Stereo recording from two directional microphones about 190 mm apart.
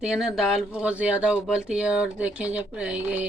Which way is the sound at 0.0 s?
5° right (ahead or behind).